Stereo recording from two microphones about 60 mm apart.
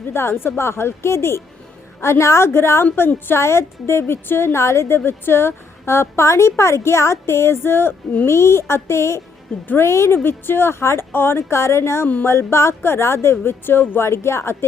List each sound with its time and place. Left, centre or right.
0.1 s a woman's voice: left
3.3 s a woman's voice: left